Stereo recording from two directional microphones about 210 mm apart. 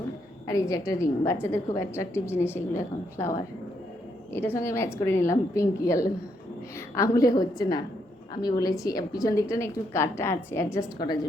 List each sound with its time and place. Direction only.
0.4 s a woman's voice: 15° left (ahead or behind)